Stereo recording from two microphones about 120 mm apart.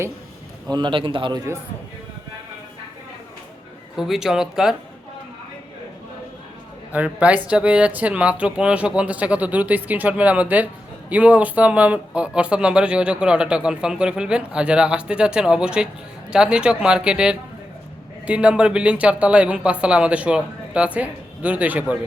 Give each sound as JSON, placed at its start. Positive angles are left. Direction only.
{"t": 0.7, "sound": "a man's voice", "side_deg": -40}
{"t": 3.9, "sound": "speech", "side_deg": -5}
{"t": 6.9, "sound": "speech", "side_deg": -10}